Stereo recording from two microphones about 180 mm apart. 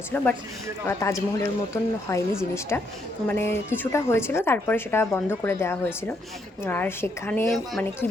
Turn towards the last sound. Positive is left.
turn(degrees=0)  # may be behind; listen again after turning